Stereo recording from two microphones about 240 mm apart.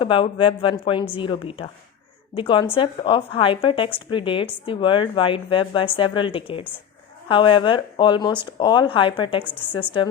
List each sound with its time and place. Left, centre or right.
0.0 s a woman's voice: left